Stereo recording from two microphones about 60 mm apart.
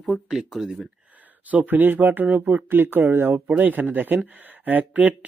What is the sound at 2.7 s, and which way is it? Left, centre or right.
Speech, right.